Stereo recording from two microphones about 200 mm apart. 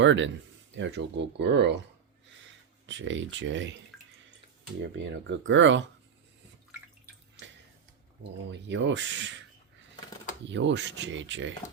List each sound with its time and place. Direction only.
0.0 s speech: 70° right (ahead or behind)
2.8 s speech: 65° right (ahead or behind)
5.4 s speech: 70° right (ahead or behind)
8.4 s speech: 60° right (ahead or behind)
10.4 s speech: 65° right (ahead or behind)